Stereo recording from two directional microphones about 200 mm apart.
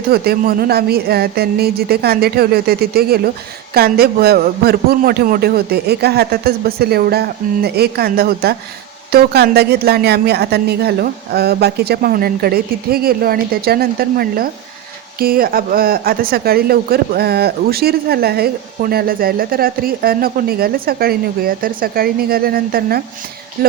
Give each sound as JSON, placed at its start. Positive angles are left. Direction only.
{"t": 0.1, "sound": "speech", "side_deg": -50}